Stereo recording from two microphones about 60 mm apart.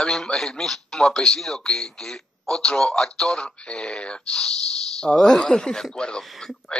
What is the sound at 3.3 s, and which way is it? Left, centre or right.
A man's voice, centre.